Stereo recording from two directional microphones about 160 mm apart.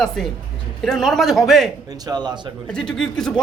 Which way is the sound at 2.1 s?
25° right (ahead or behind).